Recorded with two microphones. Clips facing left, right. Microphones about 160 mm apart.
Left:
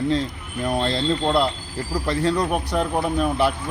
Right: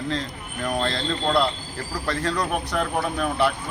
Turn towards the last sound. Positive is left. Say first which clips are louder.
# left 2 dB
turn(degrees=20)  # may be behind; listen again after turning